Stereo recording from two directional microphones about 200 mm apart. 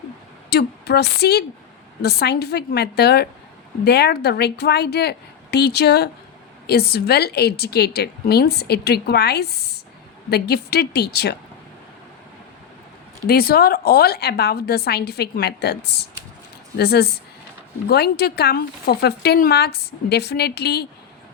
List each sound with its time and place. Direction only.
0.5 s a woman's voice: 55° left (ahead or behind)
13.2 s a woman's voice: 50° left (ahead or behind)